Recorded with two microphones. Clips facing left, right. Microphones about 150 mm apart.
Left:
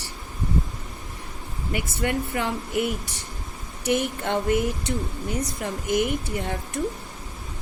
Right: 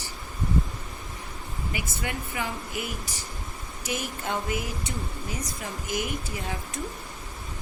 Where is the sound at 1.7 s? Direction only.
65° left (ahead or behind).